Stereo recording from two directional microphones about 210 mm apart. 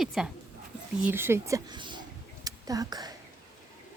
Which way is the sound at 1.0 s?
10° right (ahead or behind).